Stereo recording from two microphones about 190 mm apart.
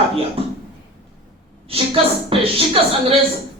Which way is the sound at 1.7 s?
30° right (ahead or behind).